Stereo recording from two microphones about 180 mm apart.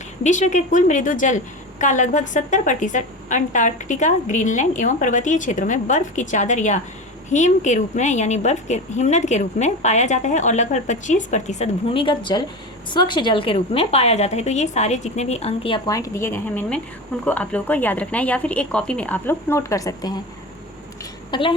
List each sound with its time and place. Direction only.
0.2 s a woman's voice: 40° left (ahead or behind); by 20.2 s 20° left (ahead or behind)
21.2 s a woman's voice: 25° left (ahead or behind)